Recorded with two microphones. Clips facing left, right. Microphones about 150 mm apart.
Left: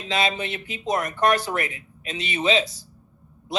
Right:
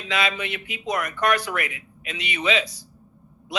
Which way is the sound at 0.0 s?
30° left (ahead or behind).